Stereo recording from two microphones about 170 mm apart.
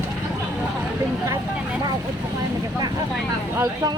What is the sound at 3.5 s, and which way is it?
Speech, 20° right (ahead or behind).